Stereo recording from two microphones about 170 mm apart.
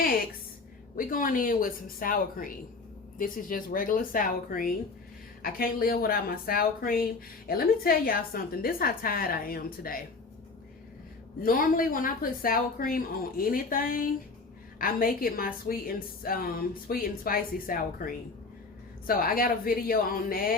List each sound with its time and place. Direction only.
0.9 s a woman's voice: 55° left (ahead or behind)
11.4 s a woman's voice: 55° left (ahead or behind)